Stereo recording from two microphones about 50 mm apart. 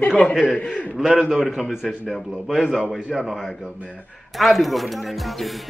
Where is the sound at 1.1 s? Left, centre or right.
Centre.